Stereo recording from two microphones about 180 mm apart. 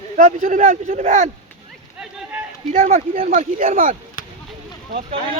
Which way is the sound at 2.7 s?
35° right (ahead or behind).